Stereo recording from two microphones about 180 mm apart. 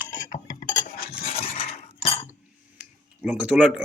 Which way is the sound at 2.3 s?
5° right (ahead or behind).